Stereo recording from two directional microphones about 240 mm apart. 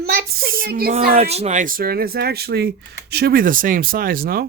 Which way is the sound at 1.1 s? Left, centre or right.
Right.